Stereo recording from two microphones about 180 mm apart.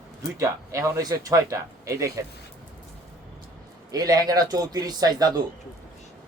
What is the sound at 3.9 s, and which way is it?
Speech, 20° right (ahead or behind).